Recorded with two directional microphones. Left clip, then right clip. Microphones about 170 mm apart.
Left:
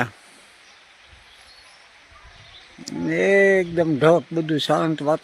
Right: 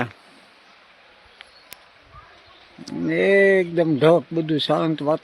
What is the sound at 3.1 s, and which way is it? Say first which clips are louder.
Speech: even; 5° left (ahead or behind).